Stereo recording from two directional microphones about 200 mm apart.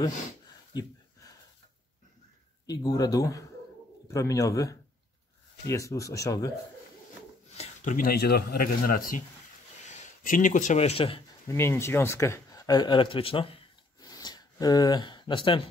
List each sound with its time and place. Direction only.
2.6 s speech: 20° left (ahead or behind)
7.5 s speech: 35° left (ahead or behind)
11.4 s speech: 10° left (ahead or behind); by 13.6 s 25° left (ahead or behind)
14.0 s a sound: 20° left (ahead or behind)